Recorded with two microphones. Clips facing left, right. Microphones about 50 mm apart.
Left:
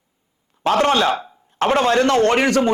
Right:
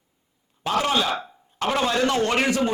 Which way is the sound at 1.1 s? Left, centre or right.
Centre.